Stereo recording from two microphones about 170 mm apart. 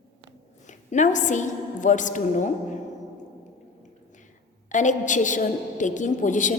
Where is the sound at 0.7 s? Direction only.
45° left (ahead or behind).